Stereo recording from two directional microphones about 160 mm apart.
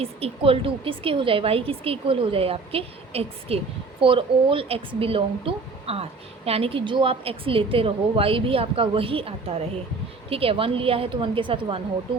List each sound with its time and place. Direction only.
0.0 s speech: 35° right (ahead or behind)